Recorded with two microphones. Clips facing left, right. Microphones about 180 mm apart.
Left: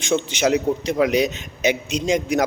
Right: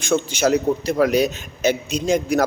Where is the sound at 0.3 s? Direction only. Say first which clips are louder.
Right 1 dB; 20° left (ahead or behind).